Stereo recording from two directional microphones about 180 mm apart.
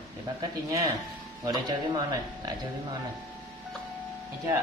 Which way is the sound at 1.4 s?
20° right (ahead or behind).